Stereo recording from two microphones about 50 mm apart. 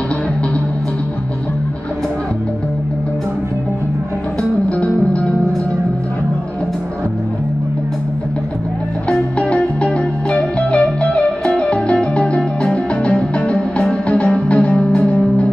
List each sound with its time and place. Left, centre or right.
4.4 s music: left
9.1 s music: left